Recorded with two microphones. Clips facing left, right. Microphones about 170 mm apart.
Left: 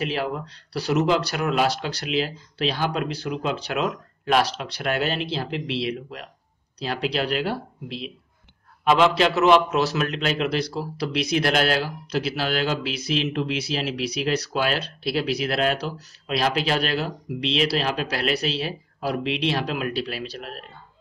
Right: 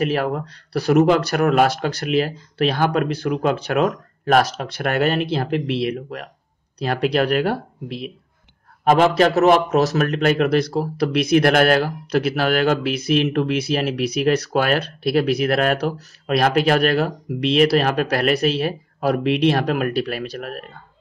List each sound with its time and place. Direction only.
0.0 s a man's voice: 50° right (ahead or behind)